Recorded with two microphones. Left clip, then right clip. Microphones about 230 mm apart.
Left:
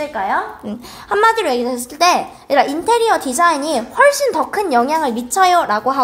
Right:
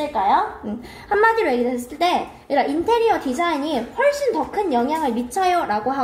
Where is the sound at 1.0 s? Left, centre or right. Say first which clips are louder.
Left 3 dB; left.